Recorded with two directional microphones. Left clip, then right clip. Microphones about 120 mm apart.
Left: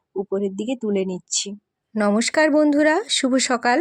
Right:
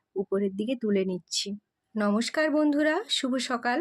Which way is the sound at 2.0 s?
85° left.